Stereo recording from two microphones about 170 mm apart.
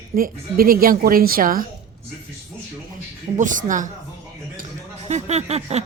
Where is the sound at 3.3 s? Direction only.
50° right (ahead or behind).